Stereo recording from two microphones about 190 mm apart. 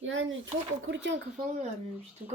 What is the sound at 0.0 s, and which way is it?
Speech, 90° right.